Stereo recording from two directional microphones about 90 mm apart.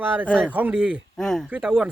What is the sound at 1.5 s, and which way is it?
Speech, 5° right (ahead or behind).